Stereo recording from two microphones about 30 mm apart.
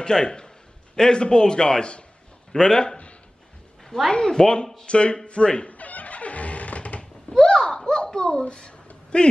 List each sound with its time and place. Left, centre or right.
0.0 s a man's voice: left
3.8 s a sound: centre
4.1 s a man's voice: left
4.8 s speech: left
5.7 s music: left
7.0 s a sound: left
8.1 s a child's voice: left